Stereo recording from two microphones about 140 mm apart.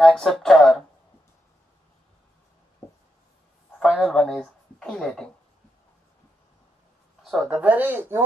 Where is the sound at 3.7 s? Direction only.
5° right (ahead or behind).